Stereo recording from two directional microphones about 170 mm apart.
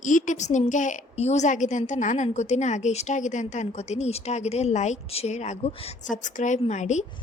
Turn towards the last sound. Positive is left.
turn(degrees=45)  # may be behind; listen again after turning